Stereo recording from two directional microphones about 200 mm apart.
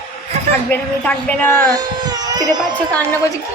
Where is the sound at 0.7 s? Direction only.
10° left (ahead or behind).